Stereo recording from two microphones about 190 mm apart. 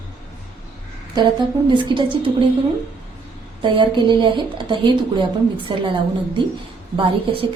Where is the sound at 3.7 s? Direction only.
25° right (ahead or behind).